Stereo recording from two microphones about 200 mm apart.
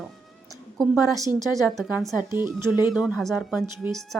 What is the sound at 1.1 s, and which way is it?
A woman's voice, 15° right (ahead or behind).